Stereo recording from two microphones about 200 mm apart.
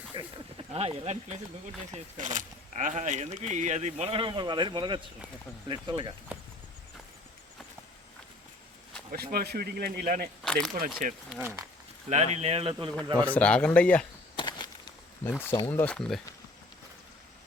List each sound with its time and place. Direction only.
0.1 s speech: 25° right (ahead or behind)
9.1 s speech: 50° right (ahead or behind)
10.4 s speech: 5° left (ahead or behind)
10.8 s speech: 40° right (ahead or behind)
11.3 s speech: 10° right (ahead or behind)
12.0 s speech: 35° right (ahead or behind)
13.3 s speech: 5° left (ahead or behind)
14.3 s a sound: 20° left (ahead or behind)
15.2 s speech: 10° left (ahead or behind)